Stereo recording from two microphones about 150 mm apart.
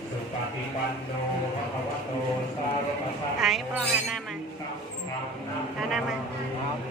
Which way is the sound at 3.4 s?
Centre (ahead or behind).